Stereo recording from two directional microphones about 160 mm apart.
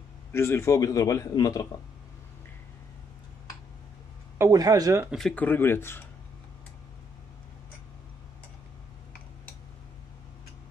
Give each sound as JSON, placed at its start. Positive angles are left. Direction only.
{"t": 0.3, "sound": "a man's voice", "side_deg": 15}
{"t": 4.4, "sound": "speech", "side_deg": -20}
{"t": 5.1, "sound": "speech", "side_deg": 5}